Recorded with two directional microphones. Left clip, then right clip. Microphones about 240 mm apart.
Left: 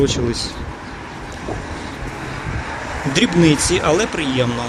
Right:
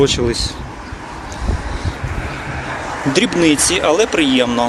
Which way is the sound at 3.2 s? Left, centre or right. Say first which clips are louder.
Right 1 dB; right.